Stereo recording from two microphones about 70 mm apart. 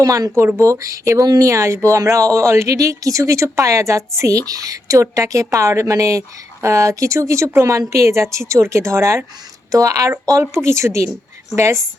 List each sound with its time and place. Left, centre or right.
0.0 s a woman's voice: right
9.7 s speech: right
10.5 s a woman's voice: right